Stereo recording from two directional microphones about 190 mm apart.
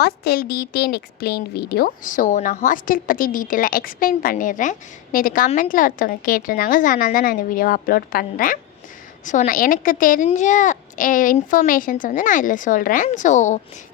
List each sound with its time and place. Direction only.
0.0 s speech: 55° left (ahead or behind); by 13.6 s 40° left (ahead or behind)